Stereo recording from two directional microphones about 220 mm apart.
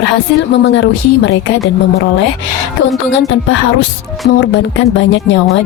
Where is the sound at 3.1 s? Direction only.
60° left (ahead or behind).